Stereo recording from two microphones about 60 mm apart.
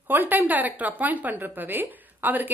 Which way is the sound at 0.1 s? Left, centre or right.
Right.